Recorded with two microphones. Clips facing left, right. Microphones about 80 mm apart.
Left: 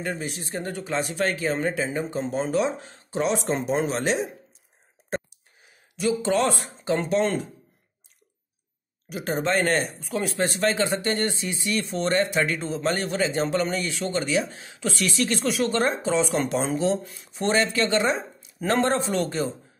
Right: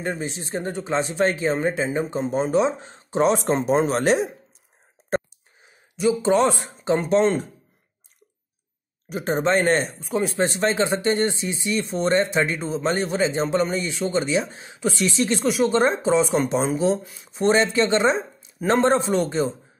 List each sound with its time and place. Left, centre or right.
0.0 s speech: right
5.6 s speech: right
9.1 s speech: right
17.0 s speech: centre
17.3 s speech: right